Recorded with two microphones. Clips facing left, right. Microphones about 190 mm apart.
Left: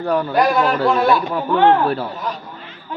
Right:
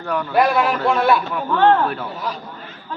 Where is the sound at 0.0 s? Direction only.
35° left (ahead or behind).